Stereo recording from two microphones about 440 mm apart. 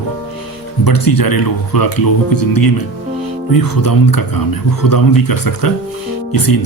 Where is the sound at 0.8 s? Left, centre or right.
Left.